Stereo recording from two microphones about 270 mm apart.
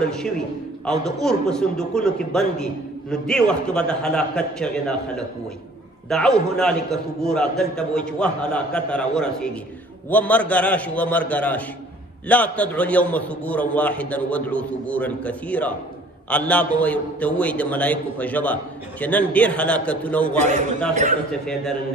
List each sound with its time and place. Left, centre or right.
0.8 s a man's voice: centre
20.9 s a man's voice: right
21.3 s a man's voice: centre